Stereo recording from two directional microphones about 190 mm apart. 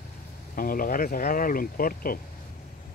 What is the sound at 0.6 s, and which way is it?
Speech, 50° left (ahead or behind).